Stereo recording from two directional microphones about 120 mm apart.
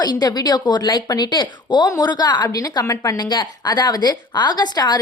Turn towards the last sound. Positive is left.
turn(degrees=35)  # may be behind; listen again after turning